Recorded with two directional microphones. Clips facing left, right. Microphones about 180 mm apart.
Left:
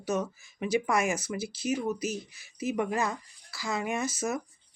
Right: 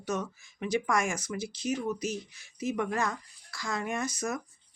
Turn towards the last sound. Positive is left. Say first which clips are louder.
# left 2 dB
turn(degrees=5)  # may be behind; listen again after turning